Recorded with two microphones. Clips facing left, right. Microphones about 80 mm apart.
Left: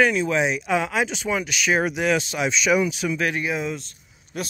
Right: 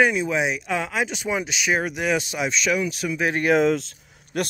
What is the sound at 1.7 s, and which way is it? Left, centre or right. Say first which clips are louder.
Speech: left 2 dB; centre.